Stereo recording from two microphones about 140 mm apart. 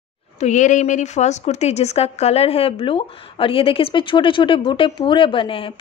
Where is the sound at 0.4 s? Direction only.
60° left (ahead or behind).